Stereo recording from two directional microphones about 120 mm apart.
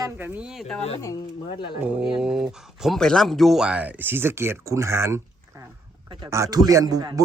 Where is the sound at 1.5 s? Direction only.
45° left (ahead or behind).